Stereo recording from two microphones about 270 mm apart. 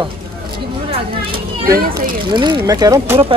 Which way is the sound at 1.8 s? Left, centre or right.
Right.